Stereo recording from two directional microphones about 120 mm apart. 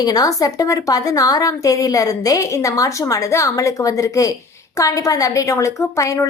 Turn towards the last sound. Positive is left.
turn(degrees=25)  # may be behind; listen again after turning